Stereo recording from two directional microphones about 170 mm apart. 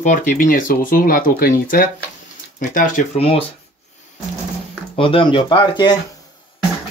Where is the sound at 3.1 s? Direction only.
35° left (ahead or behind).